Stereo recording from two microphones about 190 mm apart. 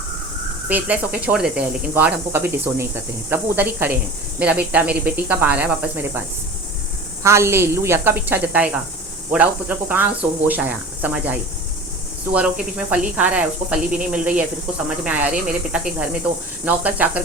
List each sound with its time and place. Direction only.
0.7 s speech: 10° right (ahead or behind)